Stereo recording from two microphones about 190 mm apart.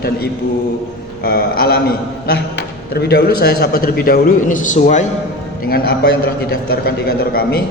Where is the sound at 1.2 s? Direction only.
50° left (ahead or behind).